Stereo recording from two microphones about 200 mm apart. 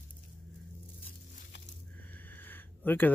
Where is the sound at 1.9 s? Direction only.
10° left (ahead or behind).